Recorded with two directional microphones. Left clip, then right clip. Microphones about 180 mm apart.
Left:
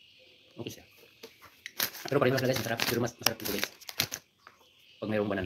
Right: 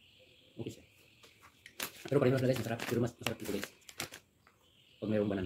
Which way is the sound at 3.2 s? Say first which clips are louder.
Left 7 dB; 20° left (ahead or behind).